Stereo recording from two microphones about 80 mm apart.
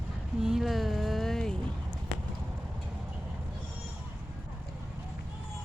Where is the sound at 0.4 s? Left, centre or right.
Centre.